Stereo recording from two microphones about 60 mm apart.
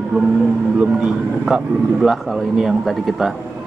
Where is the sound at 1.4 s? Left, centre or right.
Centre.